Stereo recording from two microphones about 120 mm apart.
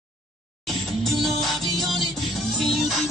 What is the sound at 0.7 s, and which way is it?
Music, centre (ahead or behind).